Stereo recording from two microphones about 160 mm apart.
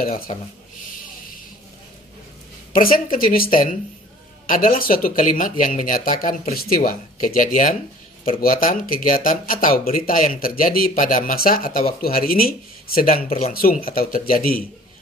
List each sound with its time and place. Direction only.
0.0 s speech: 65° left (ahead or behind)
2.7 s speech: 60° left (ahead or behind)
4.5 s speech: 60° left (ahead or behind)